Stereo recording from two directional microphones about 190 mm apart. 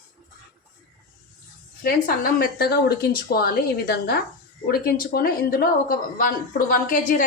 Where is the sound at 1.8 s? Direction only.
50° left (ahead or behind).